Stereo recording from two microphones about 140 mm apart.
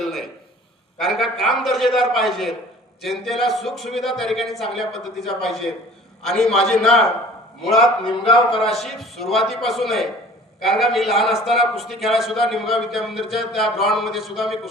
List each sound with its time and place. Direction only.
0.0 s a sound: centre (ahead or behind)
0.9 s a man's voice: centre (ahead or behind)
8.2 s a man's voice: 40° left (ahead or behind)
8.8 s a man's voice: centre (ahead or behind)